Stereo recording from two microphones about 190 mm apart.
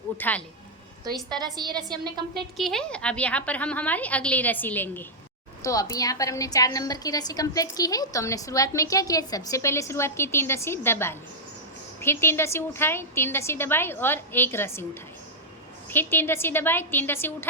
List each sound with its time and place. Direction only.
0.2 s a woman's voice: 10° left (ahead or behind)
1.4 s a woman's voice: 20° right (ahead or behind)
2.3 s a woman's voice: centre (ahead or behind)
15.9 s a woman's voice: 10° left (ahead or behind)